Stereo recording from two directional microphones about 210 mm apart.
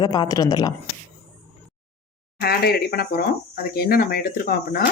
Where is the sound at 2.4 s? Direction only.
50° left (ahead or behind).